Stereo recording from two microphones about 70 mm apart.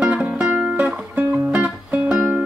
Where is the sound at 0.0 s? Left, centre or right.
Centre.